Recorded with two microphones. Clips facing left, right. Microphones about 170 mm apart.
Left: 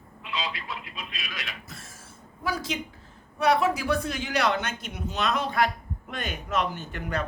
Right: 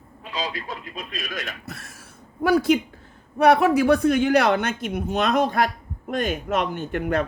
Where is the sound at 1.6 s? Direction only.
65° right (ahead or behind).